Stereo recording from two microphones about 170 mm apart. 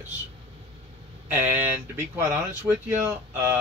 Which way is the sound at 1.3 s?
10° right (ahead or behind).